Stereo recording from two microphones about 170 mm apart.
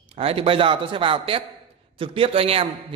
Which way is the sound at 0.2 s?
35° right (ahead or behind).